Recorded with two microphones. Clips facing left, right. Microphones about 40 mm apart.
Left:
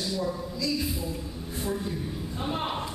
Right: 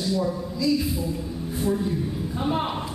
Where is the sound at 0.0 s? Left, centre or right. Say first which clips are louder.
Right 5 dB; centre.